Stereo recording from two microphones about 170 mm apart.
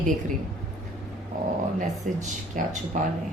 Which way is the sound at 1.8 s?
50° right (ahead or behind).